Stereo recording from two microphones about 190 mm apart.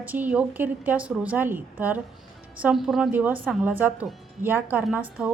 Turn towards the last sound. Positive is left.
turn(degrees=-5)  # may be behind; listen again after turning